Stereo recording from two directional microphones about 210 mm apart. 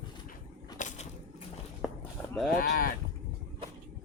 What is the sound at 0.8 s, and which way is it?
Crushing, 35° left (ahead or behind).